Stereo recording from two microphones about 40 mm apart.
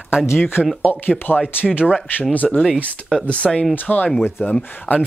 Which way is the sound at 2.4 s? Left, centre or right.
Centre.